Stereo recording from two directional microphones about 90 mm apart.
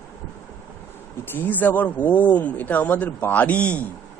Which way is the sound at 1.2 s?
20° left (ahead or behind).